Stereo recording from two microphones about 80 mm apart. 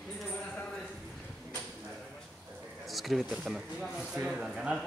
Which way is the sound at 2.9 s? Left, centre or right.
Centre.